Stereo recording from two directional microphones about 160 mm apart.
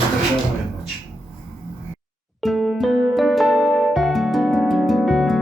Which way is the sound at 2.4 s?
Centre (ahead or behind).